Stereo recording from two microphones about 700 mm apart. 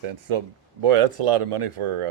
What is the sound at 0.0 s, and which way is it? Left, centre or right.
Speech, right.